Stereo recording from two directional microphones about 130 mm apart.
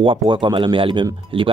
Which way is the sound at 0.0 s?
40° right (ahead or behind).